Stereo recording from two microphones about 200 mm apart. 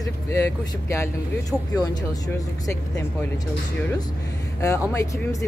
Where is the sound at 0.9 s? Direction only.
15° left (ahead or behind).